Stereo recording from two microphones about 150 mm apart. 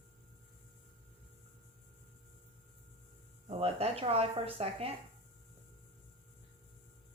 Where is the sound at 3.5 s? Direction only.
40° right (ahead or behind).